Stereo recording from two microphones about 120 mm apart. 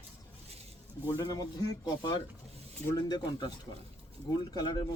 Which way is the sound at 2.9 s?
35° left (ahead or behind).